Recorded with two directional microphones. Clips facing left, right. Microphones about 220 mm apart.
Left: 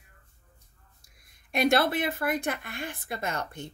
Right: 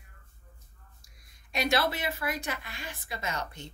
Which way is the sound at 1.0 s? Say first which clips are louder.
Right 1 dB; 55° left (ahead or behind).